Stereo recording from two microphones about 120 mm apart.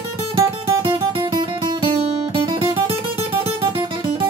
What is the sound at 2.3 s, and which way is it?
Music, 45° right (ahead or behind).